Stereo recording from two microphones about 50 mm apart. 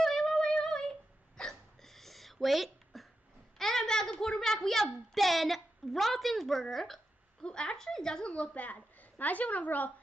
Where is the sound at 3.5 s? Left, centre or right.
Centre.